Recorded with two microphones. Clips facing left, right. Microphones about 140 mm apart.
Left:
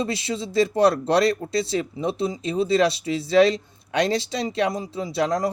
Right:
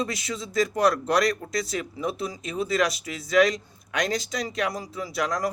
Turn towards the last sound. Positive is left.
turn(degrees=30)  # may be behind; listen again after turning